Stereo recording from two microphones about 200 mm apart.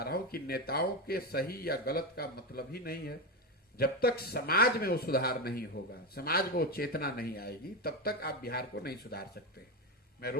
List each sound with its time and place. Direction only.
0.0 s speech: 50° left (ahead or behind)